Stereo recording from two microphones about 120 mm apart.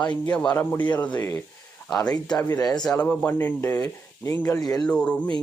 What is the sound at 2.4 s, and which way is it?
Speech, 30° left (ahead or behind).